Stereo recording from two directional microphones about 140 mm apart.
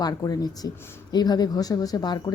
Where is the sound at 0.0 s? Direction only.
30° left (ahead or behind).